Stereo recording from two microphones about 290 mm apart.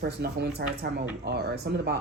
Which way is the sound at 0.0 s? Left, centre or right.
Right.